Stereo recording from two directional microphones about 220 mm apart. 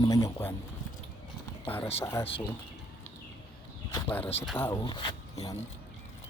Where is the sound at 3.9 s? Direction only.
10° left (ahead or behind).